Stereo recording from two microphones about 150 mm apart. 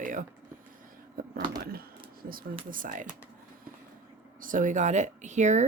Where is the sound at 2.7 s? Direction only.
65° right (ahead or behind).